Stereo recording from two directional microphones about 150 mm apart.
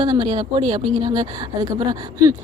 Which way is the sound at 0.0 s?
30° right (ahead or behind).